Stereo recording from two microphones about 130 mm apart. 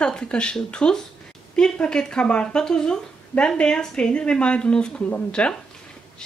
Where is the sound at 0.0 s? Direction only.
5° left (ahead or behind).